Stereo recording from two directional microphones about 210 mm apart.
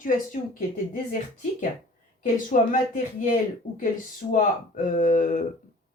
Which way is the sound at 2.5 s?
40° left (ahead or behind).